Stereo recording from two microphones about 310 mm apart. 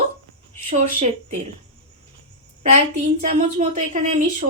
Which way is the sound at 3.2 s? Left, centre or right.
Right.